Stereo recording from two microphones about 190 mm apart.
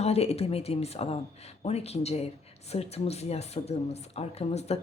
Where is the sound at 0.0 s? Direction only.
35° left (ahead or behind).